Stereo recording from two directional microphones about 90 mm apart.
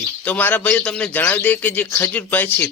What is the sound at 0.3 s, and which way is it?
Speech, 15° left (ahead or behind).